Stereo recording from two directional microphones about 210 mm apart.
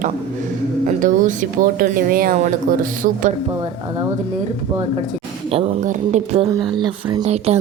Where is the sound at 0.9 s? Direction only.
40° right (ahead or behind).